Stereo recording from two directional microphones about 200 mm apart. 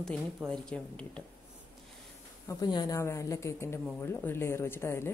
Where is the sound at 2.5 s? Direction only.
20° left (ahead or behind).